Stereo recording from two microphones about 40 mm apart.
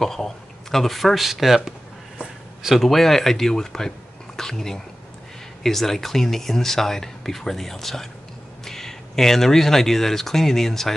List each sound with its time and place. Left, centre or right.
0.0 s speech: centre
2.1 s a sound: centre
2.8 s speech: centre